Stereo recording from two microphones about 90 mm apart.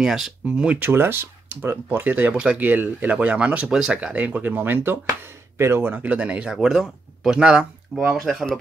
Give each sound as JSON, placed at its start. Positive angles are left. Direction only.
{"t": 0.0, "sound": "speech", "side_deg": -5}
{"t": 0.8, "sound": "speech", "side_deg": -25}
{"t": 6.0, "sound": "speech", "side_deg": -15}